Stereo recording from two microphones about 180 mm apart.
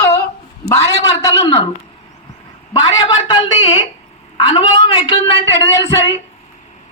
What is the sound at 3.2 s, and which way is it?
A woman's voice, 25° left (ahead or behind).